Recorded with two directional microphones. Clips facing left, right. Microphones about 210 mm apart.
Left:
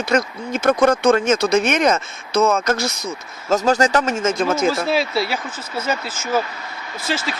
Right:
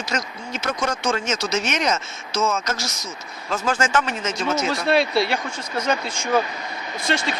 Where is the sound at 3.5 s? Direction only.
40° left (ahead or behind).